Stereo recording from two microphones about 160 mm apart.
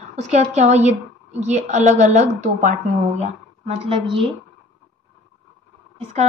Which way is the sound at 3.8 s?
35° right (ahead or behind).